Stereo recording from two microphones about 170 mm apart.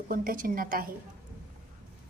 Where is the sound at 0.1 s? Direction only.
55° right (ahead or behind).